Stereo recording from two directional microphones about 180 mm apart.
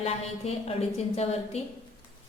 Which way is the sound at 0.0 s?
35° left (ahead or behind).